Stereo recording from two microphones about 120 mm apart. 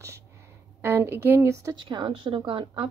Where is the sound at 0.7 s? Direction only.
20° right (ahead or behind).